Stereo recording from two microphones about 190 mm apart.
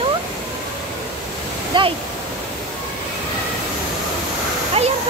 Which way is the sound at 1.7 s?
25° right (ahead or behind).